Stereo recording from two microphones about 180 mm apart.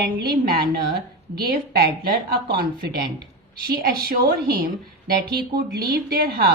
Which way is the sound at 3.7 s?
55° right (ahead or behind).